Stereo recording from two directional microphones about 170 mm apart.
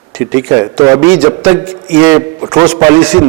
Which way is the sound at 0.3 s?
20° right (ahead or behind).